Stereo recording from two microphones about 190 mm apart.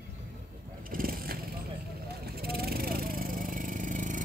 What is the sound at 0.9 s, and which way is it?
Vehicle, 50° right (ahead or behind).